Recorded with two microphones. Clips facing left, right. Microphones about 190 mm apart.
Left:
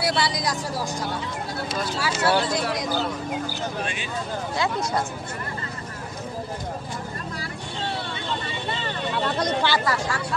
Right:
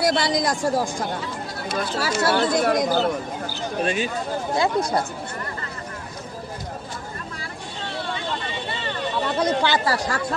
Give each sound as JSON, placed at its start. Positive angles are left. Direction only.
{"t": 0.0, "sound": "speech", "side_deg": -45}
{"t": 3.8, "sound": "speech", "side_deg": -40}
{"t": 9.4, "sound": "speech", "side_deg": -15}
{"t": 9.8, "sound": "speech", "side_deg": -40}